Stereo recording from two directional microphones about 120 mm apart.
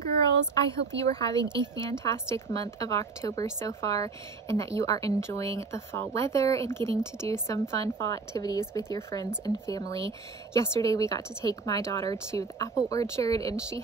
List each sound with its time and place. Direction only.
0.7 s speech: 30° left (ahead or behind)